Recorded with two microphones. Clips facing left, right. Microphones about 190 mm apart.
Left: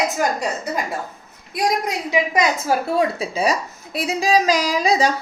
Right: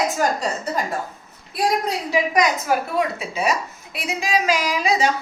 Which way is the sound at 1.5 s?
15° left (ahead or behind).